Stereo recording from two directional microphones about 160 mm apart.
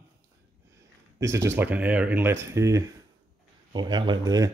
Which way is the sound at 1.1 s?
15° right (ahead or behind).